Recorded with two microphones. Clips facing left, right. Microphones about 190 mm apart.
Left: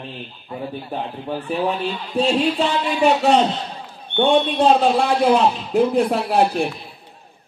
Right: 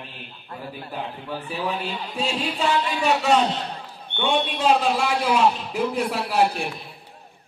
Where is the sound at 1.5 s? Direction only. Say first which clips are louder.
Left 7 dB; 55° left (ahead or behind).